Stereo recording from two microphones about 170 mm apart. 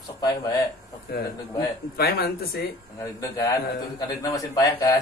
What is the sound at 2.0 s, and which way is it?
Speech, 65° left (ahead or behind).